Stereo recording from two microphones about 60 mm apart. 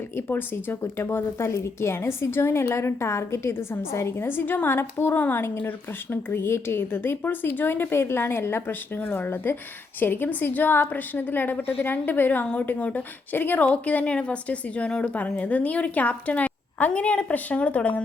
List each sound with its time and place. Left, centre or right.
0.2 s a woman's voice: left